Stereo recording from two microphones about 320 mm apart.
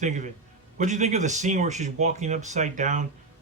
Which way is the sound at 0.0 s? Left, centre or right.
Right.